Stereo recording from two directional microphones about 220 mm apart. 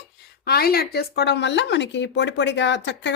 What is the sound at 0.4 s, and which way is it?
Speech, 45° left (ahead or behind).